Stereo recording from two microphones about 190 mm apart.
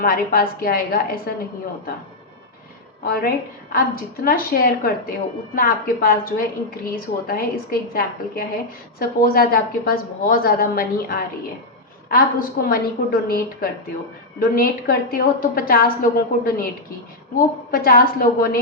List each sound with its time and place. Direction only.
0.0 s a woman's voice: 50° left (ahead or behind)
3.1 s a woman's voice: 50° left (ahead or behind)
17.7 s a woman's voice: 50° left (ahead or behind)